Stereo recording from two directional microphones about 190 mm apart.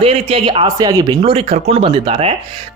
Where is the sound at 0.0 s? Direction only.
30° right (ahead or behind).